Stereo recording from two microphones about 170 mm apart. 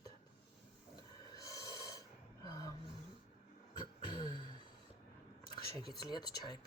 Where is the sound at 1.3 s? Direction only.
20° left (ahead or behind).